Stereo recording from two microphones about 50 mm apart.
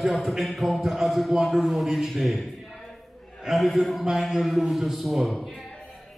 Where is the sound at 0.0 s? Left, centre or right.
Centre.